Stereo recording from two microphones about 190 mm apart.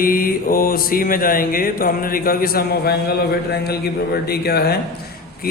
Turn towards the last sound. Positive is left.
turn(degrees=50)  # may be behind; listen again after turning